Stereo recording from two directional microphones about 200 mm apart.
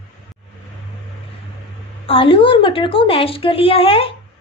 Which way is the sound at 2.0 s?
25° left (ahead or behind).